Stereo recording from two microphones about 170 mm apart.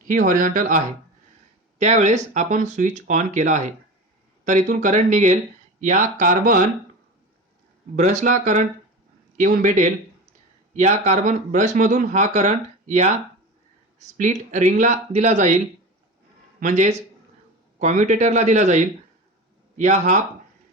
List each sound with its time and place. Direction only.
0.1 s speech: 50° right (ahead or behind)
7.9 s speech: 45° right (ahead or behind)
14.2 s speech: 45° right (ahead or behind)